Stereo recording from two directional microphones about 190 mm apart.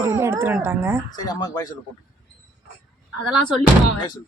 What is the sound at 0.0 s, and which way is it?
Speech, 15° right (ahead or behind).